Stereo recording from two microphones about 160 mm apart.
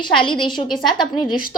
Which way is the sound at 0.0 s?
30° left (ahead or behind).